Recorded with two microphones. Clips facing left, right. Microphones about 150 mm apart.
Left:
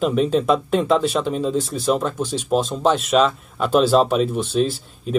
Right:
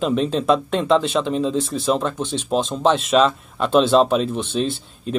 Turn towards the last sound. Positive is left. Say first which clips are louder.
# left 2 dB
turn(degrees=5)  # may be behind; listen again after turning